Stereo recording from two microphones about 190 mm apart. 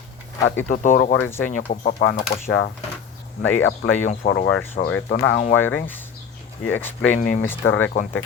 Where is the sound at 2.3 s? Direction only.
25° left (ahead or behind).